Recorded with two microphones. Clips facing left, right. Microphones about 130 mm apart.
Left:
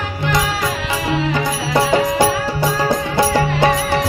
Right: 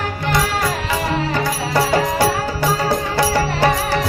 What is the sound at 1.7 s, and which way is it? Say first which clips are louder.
Music: left 2 dB; 20° left (ahead or behind).